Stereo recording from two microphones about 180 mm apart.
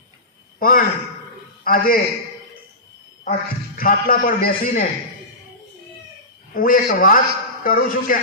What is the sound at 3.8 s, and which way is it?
A man's voice, 50° left (ahead or behind).